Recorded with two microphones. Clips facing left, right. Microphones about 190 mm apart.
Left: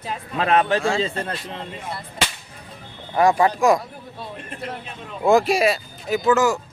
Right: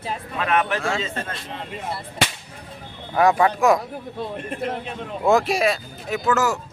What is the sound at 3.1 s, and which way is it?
Speech, centre (ahead or behind).